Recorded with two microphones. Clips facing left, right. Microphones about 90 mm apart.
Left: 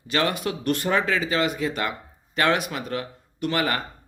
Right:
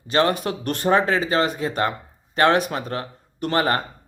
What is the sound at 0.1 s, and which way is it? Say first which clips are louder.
Speech: right 4 dB; 35° right (ahead or behind).